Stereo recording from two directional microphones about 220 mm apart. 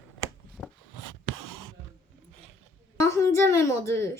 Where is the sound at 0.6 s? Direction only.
5° right (ahead or behind).